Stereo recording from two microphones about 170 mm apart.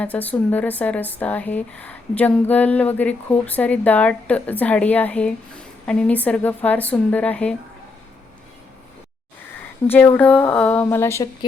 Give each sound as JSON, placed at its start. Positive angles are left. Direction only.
{"t": 0.0, "sound": "speech", "side_deg": 10}
{"t": 9.8, "sound": "speech", "side_deg": 10}